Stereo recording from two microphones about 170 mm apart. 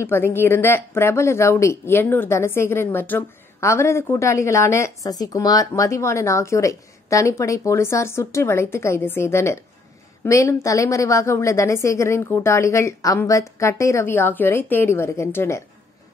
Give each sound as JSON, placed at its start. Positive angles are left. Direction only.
{"t": 0.0, "sound": "speech", "side_deg": 15}